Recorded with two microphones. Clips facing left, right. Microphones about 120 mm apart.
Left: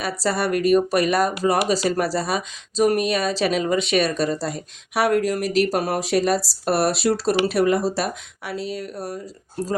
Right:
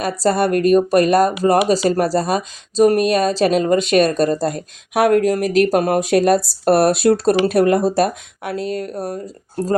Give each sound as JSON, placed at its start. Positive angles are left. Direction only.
{"t": 0.0, "sound": "speech", "side_deg": -45}